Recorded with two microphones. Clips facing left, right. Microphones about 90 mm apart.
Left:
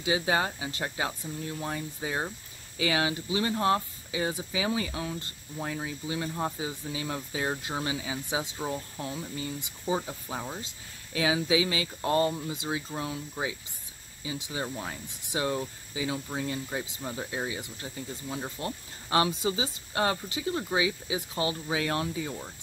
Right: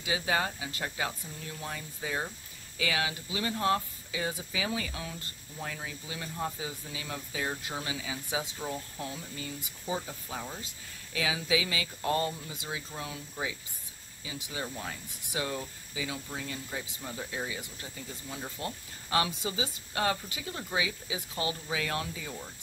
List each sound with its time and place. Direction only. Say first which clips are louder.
0.0 s speech: left 3 dB; 25° left (ahead or behind)
11.1 s speech: left 5 dB; 30° left (ahead or behind)